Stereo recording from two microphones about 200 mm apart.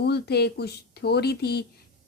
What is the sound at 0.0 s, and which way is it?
Speech, 55° left (ahead or behind).